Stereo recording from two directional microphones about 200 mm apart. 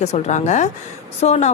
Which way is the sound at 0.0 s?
35° left (ahead or behind).